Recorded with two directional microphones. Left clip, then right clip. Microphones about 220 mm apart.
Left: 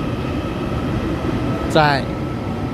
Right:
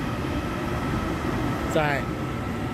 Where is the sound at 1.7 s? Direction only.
15° left (ahead or behind).